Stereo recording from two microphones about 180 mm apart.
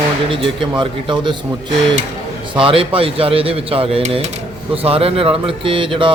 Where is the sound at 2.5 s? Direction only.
30° right (ahead or behind).